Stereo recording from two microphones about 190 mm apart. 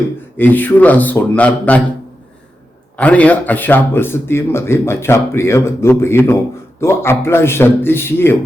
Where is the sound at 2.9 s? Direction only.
5° left (ahead or behind).